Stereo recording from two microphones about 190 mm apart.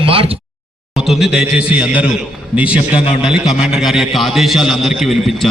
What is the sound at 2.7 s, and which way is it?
Speech, 30° left (ahead or behind).